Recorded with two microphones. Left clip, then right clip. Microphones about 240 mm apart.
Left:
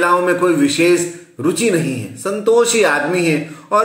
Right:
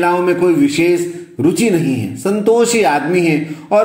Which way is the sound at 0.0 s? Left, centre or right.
Centre.